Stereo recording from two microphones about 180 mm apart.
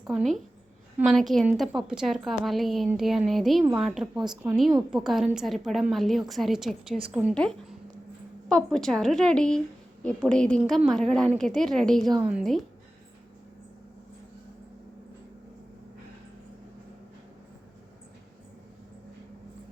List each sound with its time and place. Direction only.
0.1 s a woman's voice: centre (ahead or behind)
8.4 s a woman's voice: 5° left (ahead or behind)